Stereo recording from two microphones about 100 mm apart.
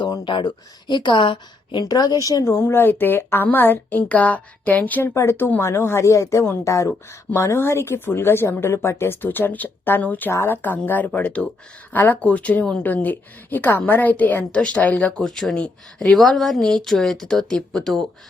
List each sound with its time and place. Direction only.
0.0 s a woman's voice: 50° left (ahead or behind); by 15.2 s 15° left (ahead or behind)
15.2 s speech: 5° left (ahead or behind)